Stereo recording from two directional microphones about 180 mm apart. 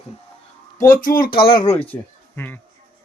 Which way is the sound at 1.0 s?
50° left (ahead or behind).